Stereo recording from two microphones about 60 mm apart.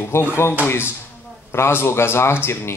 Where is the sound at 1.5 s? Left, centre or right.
Left.